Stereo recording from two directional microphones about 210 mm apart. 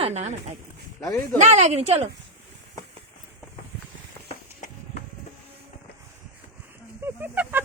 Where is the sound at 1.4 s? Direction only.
30° right (ahead or behind).